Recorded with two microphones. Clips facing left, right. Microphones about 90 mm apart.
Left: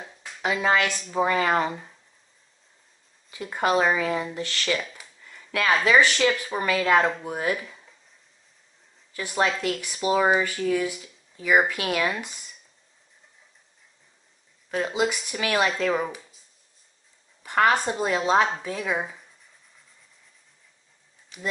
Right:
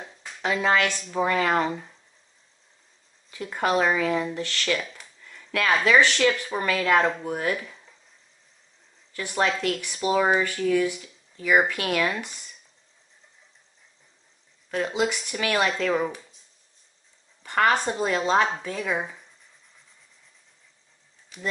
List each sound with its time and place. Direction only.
0.0 s a sound: centre (ahead or behind)
0.4 s speech: 10° left (ahead or behind)
3.3 s speech: 15° left (ahead or behind)
5.2 s a sound: 15° left (ahead or behind)
5.9 s speech: 10° left (ahead or behind)
7.2 s speech: 15° left (ahead or behind)
7.5 s a sound: centre (ahead or behind)
9.1 s speech: 10° left (ahead or behind)
14.7 s speech: 5° left (ahead or behind)
17.4 s speech: 10° left (ahead or behind)
21.3 s speech: 5° left (ahead or behind)